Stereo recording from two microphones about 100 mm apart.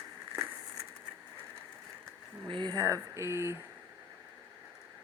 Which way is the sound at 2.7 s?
30° right (ahead or behind).